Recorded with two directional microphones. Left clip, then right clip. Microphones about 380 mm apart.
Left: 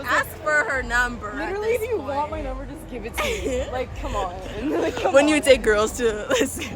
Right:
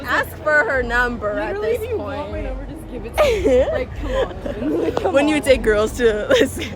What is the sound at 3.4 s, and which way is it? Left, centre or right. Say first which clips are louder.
Speech: right 11 dB; centre.